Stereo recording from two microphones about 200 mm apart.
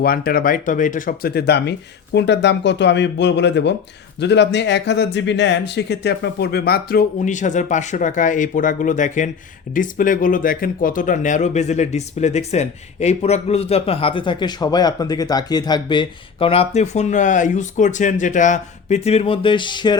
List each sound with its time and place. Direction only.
0.0 s speech: 45° left (ahead or behind); by 20.0 s 20° left (ahead or behind)